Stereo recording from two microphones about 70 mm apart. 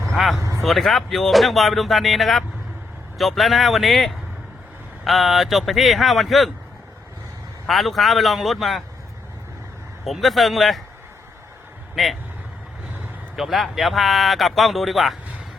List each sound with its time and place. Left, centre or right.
0.1 s vehicle: centre
0.3 s vehicle: right
0.6 s speech: centre
7.7 s speech: centre
10.1 s speech: centre
12.0 s speech: centre
13.3 s speech: centre